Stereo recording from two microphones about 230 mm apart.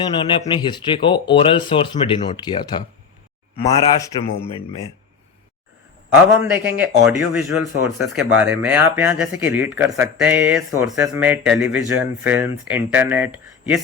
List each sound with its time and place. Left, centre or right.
0.0 s speech: left
6.4 s speech: centre